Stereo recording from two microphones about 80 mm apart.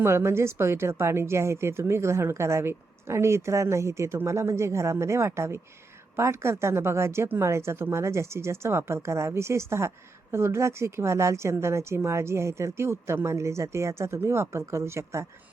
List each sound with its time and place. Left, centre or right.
0.0 s speech: right